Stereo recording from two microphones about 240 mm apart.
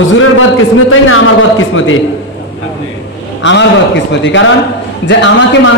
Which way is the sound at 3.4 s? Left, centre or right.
Left.